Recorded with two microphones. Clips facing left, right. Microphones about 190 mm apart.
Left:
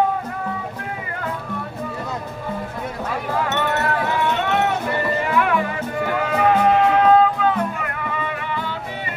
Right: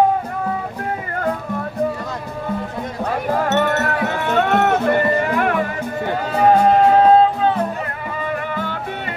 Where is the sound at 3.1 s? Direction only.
45° right (ahead or behind).